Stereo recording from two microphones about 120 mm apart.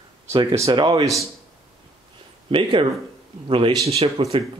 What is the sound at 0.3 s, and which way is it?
Speech, 40° right (ahead or behind).